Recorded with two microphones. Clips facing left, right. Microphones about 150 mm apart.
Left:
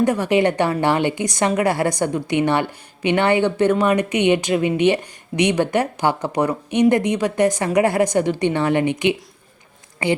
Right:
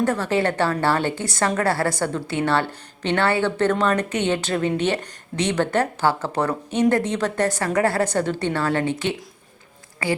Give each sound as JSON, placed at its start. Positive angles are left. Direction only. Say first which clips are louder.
{"t": 0.0, "sound": "a woman's voice", "louder": "left 4 dB", "side_deg": 15}